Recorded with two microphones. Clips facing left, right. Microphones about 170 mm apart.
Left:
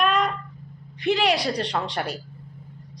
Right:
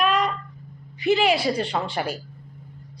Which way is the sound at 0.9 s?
5° right (ahead or behind).